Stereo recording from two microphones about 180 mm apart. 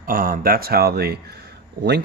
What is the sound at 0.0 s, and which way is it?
Speech, 50° right (ahead or behind).